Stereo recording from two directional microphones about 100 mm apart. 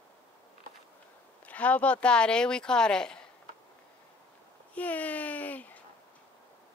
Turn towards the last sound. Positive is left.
turn(degrees=15)  # may be behind; listen again after turning